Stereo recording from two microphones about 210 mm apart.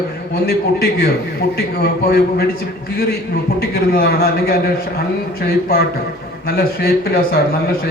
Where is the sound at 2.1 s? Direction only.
45° left (ahead or behind).